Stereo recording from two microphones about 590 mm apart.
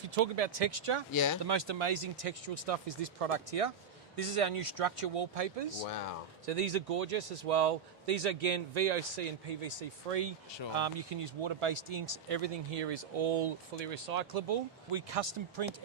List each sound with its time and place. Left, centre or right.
0.2 s speech: right
1.1 s speech: left
1.5 s speech: right
4.2 s speech: right
5.9 s speech: left
6.4 s a man's voice: right
10.8 s speech: right